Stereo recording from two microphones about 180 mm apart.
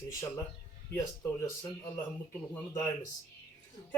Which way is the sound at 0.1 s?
15° left (ahead or behind).